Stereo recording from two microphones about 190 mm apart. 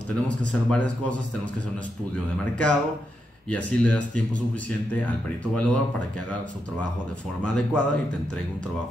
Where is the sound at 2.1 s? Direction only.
5° left (ahead or behind).